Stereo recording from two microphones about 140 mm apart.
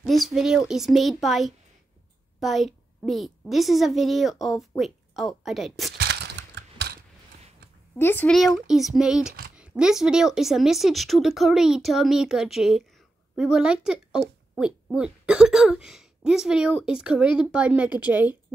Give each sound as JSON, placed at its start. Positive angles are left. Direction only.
{"t": 0.0, "sound": "a woman's voice", "side_deg": 0}
{"t": 8.0, "sound": "speech", "side_deg": 15}
{"t": 8.3, "sound": "a woman's voice", "side_deg": 0}